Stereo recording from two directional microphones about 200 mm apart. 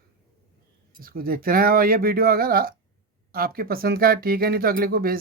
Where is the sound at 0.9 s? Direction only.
45° right (ahead or behind).